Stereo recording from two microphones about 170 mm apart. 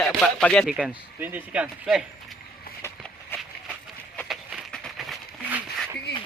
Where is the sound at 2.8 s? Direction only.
15° left (ahead or behind).